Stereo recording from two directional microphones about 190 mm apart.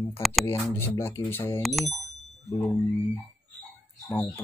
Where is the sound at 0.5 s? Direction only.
15° left (ahead or behind).